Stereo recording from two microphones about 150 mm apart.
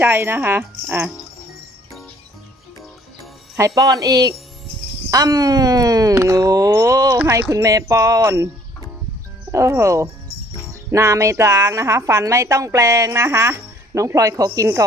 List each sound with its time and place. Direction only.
0.0 s speech: 15° right (ahead or behind)
3.6 s a woman's voice: 25° right (ahead or behind)
9.5 s a woman's voice: 20° right (ahead or behind)